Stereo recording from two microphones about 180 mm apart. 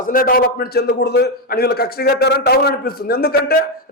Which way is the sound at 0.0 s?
50° left (ahead or behind).